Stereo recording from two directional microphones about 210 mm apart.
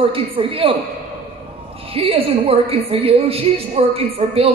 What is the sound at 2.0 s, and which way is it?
A woman's voice, 25° right (ahead or behind).